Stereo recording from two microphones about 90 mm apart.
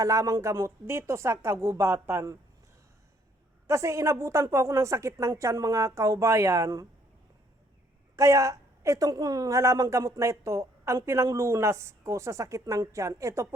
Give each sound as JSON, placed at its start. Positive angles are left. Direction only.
{"t": 0.0, "sound": "a woman's voice", "side_deg": -40}
{"t": 3.7, "sound": "a woman's voice", "side_deg": -35}
{"t": 8.1, "sound": "a woman's voice", "side_deg": -35}